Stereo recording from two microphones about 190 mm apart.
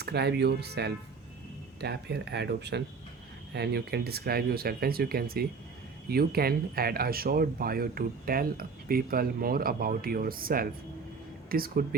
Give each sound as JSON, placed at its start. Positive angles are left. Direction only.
{"t": 0.0, "sound": "speech", "side_deg": -60}